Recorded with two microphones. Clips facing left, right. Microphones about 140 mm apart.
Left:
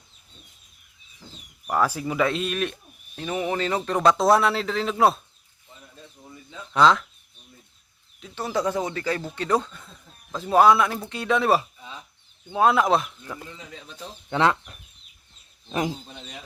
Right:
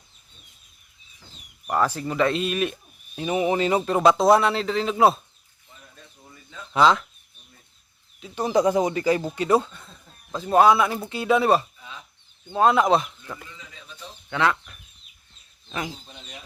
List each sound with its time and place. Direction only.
1.6 s a man's voice: centre (ahead or behind)
3.2 s a man's voice: 15° right (ahead or behind)
6.7 s a man's voice: 5° right (ahead or behind)
8.4 s a man's voice: 15° right (ahead or behind); by 13.4 s centre (ahead or behind)
14.3 s speech: 25° left (ahead or behind)